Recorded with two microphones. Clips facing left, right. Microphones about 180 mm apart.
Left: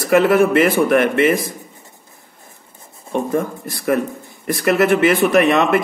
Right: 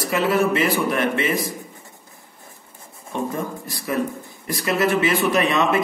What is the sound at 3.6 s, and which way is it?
Speech, 55° left (ahead or behind).